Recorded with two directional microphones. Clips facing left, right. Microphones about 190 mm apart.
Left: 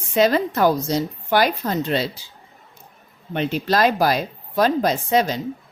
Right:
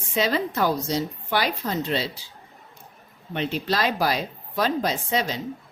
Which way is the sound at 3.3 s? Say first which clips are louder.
Left 5 dB; 50° left (ahead or behind).